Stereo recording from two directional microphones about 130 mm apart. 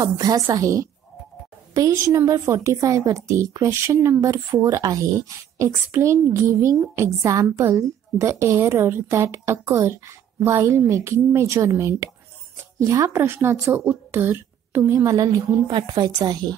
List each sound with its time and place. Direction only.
0.0 s a woman's voice: 30° right (ahead or behind)